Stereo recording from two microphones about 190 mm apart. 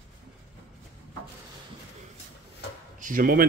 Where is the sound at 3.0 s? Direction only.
50° right (ahead or behind).